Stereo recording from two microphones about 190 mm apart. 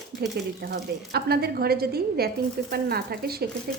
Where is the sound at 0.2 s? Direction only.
60° right (ahead or behind).